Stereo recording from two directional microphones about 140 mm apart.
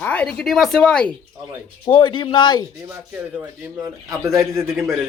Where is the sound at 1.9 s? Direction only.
35° left (ahead or behind).